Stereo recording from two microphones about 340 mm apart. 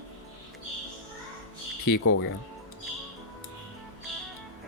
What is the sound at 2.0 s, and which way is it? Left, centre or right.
Speech, left.